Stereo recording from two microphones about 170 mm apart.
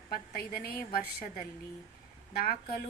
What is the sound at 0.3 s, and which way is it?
A woman's voice, 65° left (ahead or behind).